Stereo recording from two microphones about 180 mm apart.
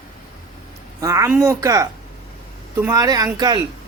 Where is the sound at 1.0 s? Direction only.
15° right (ahead or behind).